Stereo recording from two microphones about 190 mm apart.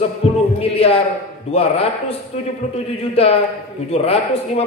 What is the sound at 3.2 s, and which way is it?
A man's voice, 30° left (ahead or behind).